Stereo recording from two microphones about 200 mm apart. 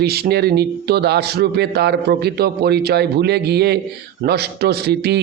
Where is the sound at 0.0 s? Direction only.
50° right (ahead or behind).